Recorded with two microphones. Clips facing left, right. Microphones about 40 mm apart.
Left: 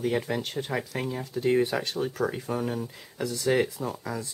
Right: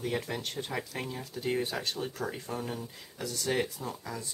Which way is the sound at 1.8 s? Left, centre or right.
Centre.